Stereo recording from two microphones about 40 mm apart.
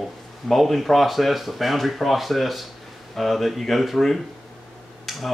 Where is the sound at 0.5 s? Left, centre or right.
Centre.